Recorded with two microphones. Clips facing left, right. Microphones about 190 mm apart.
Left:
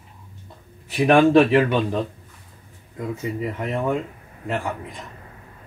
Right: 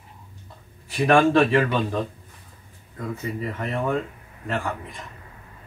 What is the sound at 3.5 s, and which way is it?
Speech, 15° left (ahead or behind).